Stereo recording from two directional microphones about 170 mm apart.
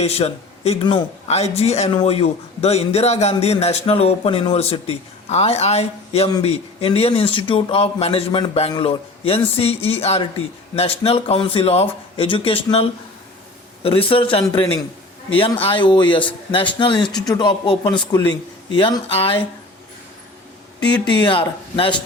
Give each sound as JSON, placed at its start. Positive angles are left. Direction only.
{"t": 0.0, "sound": "a man's voice", "side_deg": 35}
{"t": 13.8, "sound": "a man's voice", "side_deg": 35}
{"t": 21.2, "sound": "a man's voice", "side_deg": 30}